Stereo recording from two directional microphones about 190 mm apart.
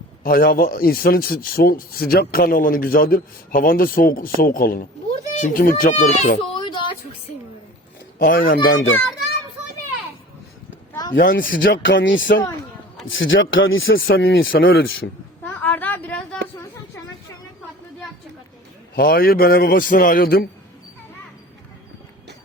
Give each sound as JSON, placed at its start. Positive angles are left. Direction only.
{"t": 0.2, "sound": "speech", "side_deg": 50}
{"t": 6.5, "sound": "a sound", "side_deg": 25}
{"t": 8.2, "sound": "speech", "side_deg": 45}
{"t": 11.1, "sound": "speech", "side_deg": 50}
{"t": 11.6, "sound": "speech", "side_deg": 70}
{"t": 14.7, "sound": "a man's voice", "side_deg": 60}
{"t": 15.4, "sound": "a sound", "side_deg": 10}
{"t": 18.9, "sound": "speech", "side_deg": 50}